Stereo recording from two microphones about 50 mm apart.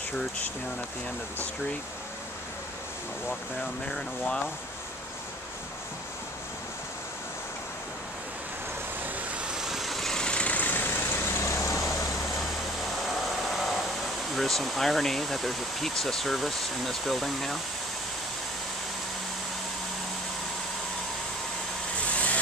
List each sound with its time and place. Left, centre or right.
3.8 s speech: centre
9.1 s vehicle: right
9.6 s vehicle: centre
10.2 s vehicle: left
11.2 s vehicle: left
11.6 s vehicle: left
13.0 s speech: centre
22.1 s vehicle: left